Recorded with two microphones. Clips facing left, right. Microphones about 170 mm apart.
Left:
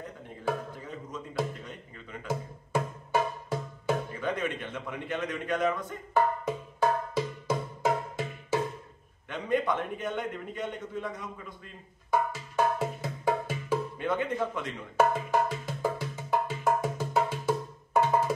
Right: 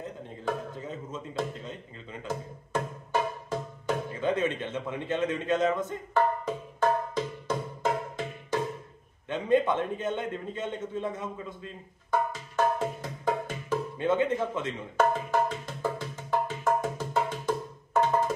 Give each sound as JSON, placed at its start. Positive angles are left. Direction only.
{"t": 2.2, "sound": "music", "side_deg": 10}
{"t": 4.2, "sound": "a man's voice", "side_deg": -25}
{"t": 6.1, "sound": "music", "side_deg": 10}
{"t": 9.3, "sound": "a man's voice", "side_deg": -25}
{"t": 12.1, "sound": "music", "side_deg": 10}
{"t": 13.9, "sound": "a man's voice", "side_deg": -25}
{"t": 15.0, "sound": "music", "side_deg": 10}